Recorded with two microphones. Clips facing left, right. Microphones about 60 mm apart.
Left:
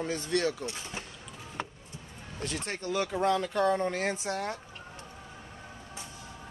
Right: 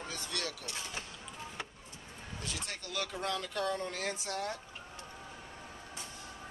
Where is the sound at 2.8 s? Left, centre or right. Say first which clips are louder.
Left 10 dB; left.